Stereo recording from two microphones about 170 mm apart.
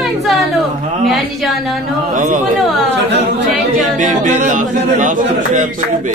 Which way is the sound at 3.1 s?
90° right.